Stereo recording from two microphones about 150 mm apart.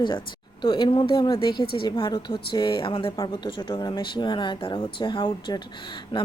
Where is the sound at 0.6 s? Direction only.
30° left (ahead or behind).